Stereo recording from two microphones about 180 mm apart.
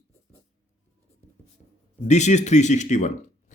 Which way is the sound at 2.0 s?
40° left (ahead or behind).